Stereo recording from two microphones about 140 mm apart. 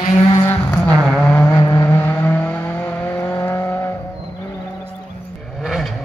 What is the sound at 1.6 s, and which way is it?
Vehicle, 25° left (ahead or behind).